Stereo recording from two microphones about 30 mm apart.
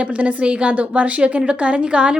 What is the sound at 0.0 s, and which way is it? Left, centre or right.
A woman's voice, right.